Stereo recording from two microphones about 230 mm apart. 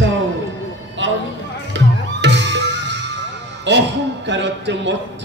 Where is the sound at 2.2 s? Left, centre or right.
Right.